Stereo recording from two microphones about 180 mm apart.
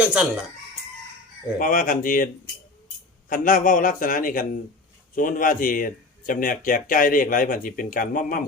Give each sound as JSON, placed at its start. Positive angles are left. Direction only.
{"t": 0.0, "sound": "speech", "side_deg": -5}
{"t": 1.5, "sound": "speech", "side_deg": 50}